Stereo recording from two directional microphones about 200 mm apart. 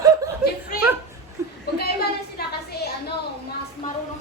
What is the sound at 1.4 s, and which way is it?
Chuckle, 15° right (ahead or behind).